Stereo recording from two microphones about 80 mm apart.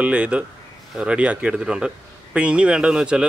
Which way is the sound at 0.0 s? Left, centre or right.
Centre.